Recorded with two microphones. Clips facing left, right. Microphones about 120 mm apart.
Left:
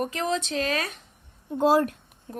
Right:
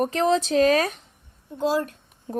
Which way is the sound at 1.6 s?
50° left (ahead or behind).